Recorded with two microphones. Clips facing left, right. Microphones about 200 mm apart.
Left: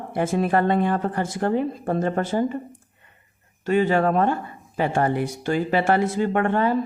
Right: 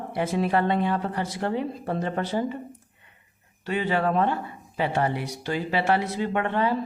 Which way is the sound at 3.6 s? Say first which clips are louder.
Left 6 dB; 45° left (ahead or behind).